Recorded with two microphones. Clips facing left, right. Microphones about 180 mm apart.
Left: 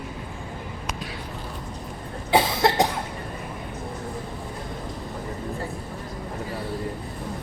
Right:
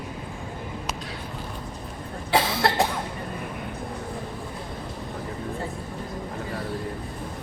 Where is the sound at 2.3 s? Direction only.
15° left (ahead or behind).